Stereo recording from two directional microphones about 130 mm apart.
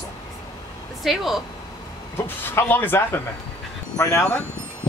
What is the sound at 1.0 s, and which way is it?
Speech, centre (ahead or behind).